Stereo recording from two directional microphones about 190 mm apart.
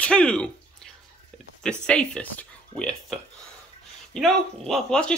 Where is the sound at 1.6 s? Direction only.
5° left (ahead or behind).